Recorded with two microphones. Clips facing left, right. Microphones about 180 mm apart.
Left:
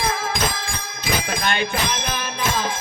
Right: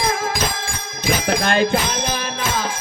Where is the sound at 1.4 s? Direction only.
35° right (ahead or behind).